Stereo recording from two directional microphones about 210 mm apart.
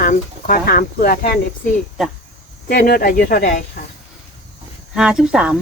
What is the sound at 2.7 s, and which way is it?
Speech, 45° left (ahead or behind).